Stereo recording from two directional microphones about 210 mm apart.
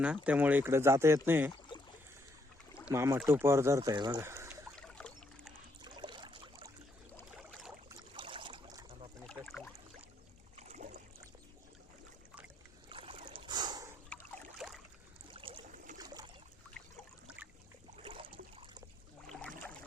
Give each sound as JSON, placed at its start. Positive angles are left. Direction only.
{"t": 0.3, "sound": "speech", "side_deg": -10}
{"t": 2.8, "sound": "speech", "side_deg": -10}
{"t": 4.9, "sound": "boat", "side_deg": 5}
{"t": 5.8, "sound": "a sound", "side_deg": -20}
{"t": 7.9, "sound": "a sound", "side_deg": -25}
{"t": 10.6, "sound": "boat", "side_deg": -35}
{"t": 12.9, "sound": "boat", "side_deg": -25}
{"t": 14.1, "sound": "boat", "side_deg": 5}
{"t": 15.3, "sound": "boat", "side_deg": -25}
{"t": 17.9, "sound": "a sound", "side_deg": -25}
{"t": 19.3, "sound": "boat", "side_deg": 5}